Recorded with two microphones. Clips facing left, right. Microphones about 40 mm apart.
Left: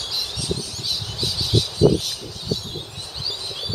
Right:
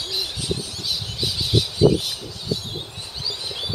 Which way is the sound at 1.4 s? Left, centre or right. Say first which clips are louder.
Even; centre.